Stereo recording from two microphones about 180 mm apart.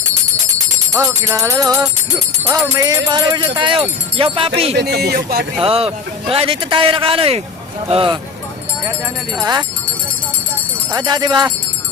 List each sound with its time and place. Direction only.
0.9 s music: 15° right (ahead or behind); by 4.7 s 30° right (ahead or behind)
4.8 s speech: 65° right (ahead or behind)
5.5 s a man's voice: 30° right (ahead or behind)
7.9 s music: 30° right (ahead or behind)
9.4 s music: 20° right (ahead or behind)
10.9 s music: 25° right (ahead or behind)